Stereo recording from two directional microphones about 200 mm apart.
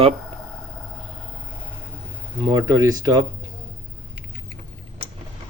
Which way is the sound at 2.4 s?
20° right (ahead or behind).